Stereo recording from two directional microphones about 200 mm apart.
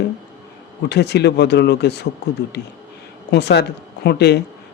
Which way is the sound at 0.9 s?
55° left (ahead or behind).